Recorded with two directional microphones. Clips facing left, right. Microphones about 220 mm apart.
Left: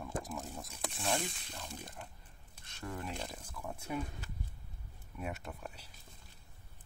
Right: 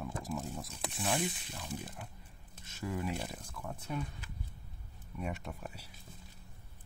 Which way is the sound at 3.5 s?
10° left (ahead or behind).